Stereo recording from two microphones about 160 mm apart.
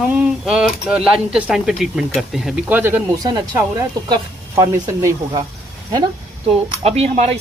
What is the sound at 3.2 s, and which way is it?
Speech, 25° right (ahead or behind).